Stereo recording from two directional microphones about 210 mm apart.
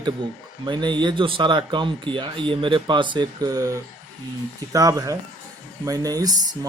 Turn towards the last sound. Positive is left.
turn(degrees=-15)  # may be behind; listen again after turning